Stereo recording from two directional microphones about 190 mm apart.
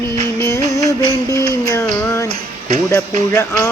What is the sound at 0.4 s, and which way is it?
Music, 15° left (ahead or behind).